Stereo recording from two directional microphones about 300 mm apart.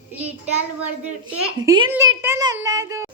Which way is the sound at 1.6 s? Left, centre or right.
Centre.